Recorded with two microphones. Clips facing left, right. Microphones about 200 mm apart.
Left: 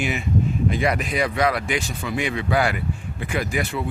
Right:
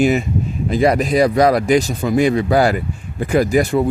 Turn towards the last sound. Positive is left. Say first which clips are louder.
# right 11 dB
turn(degrees=-40)  # may be behind; listen again after turning